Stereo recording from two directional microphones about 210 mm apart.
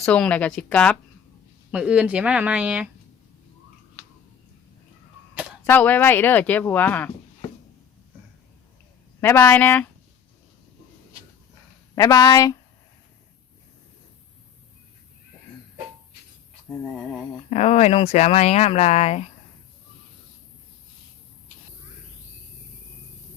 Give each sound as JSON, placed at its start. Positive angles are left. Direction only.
{"t": 0.0, "sound": "speech", "side_deg": 5}
{"t": 5.6, "sound": "speech", "side_deg": 10}
{"t": 9.2, "sound": "speech", "side_deg": 10}
{"t": 11.9, "sound": "speech", "side_deg": 20}
{"t": 17.5, "sound": "speech", "side_deg": 30}